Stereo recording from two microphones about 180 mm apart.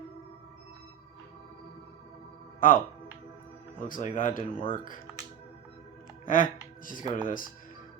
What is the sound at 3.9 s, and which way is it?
Speech, 45° left (ahead or behind).